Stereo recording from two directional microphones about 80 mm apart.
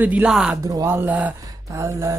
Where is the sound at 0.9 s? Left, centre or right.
Right.